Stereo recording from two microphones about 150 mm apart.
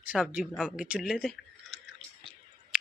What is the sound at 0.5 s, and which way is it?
Speech, 5° left (ahead or behind).